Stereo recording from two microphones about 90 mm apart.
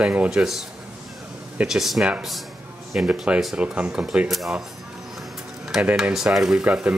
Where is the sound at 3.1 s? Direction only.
15° right (ahead or behind).